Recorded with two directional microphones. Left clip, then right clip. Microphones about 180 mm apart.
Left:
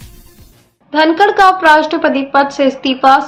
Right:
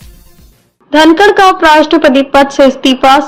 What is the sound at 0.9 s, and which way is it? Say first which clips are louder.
A woman's voice: right 5 dB; 40° right (ahead or behind).